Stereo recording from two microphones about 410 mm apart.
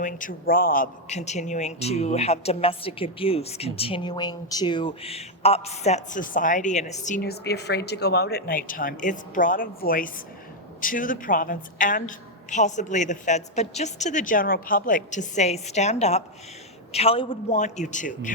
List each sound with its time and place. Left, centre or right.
0.0 s speech: centre